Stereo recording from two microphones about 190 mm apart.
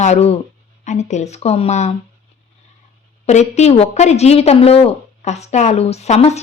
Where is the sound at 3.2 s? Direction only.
35° left (ahead or behind).